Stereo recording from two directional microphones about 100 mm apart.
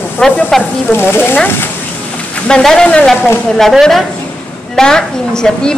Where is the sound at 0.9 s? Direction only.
20° left (ahead or behind).